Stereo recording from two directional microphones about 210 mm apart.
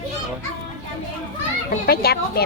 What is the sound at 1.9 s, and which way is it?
Speech, 45° left (ahead or behind).